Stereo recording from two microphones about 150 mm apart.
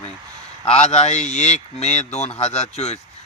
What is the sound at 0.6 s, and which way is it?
Speech, 45° left (ahead or behind).